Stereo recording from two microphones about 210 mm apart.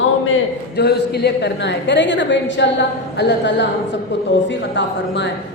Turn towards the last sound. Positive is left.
turn(degrees=60)  # may be behind; listen again after turning